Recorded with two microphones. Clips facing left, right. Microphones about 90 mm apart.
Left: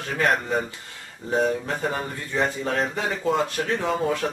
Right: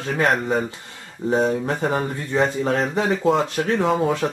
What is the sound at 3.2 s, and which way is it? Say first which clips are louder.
Speech: right 1 dB; 5° right (ahead or behind).